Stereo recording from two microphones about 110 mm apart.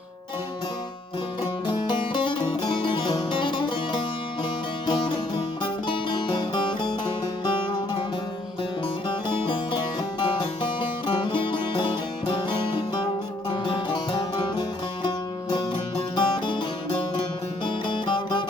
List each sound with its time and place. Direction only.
1.6 s music: 45° left (ahead or behind)
9.0 s music: 45° left (ahead or behind)